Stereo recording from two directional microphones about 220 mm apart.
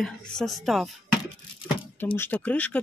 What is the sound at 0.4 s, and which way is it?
Speech, centre (ahead or behind).